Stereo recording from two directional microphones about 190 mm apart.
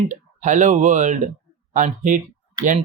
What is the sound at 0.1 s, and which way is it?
Speech, 40° right (ahead or behind).